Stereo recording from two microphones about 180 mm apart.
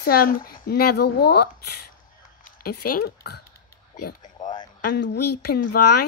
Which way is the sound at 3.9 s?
45° left (ahead or behind).